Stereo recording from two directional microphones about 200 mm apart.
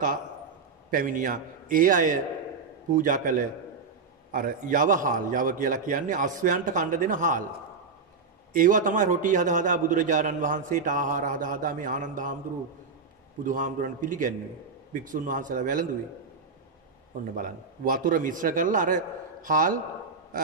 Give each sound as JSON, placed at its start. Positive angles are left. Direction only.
{"t": 0.8, "sound": "a man's voice", "side_deg": -45}
{"t": 8.5, "sound": "a man's voice", "side_deg": -40}
{"t": 13.4, "sound": "a man's voice", "side_deg": -40}
{"t": 17.4, "sound": "a man's voice", "side_deg": -45}